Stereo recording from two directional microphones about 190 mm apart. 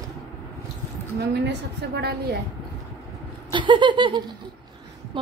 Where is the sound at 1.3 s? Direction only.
60° right (ahead or behind).